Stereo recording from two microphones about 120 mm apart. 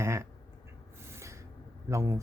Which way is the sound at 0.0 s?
25° right (ahead or behind).